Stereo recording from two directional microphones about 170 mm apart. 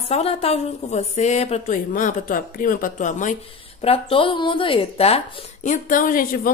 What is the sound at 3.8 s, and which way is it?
Speech, 35° left (ahead or behind).